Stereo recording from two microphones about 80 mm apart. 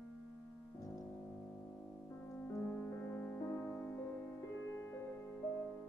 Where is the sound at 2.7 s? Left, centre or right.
Left.